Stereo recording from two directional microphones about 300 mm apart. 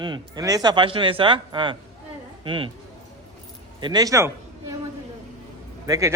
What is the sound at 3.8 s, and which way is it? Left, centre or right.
Speech, centre.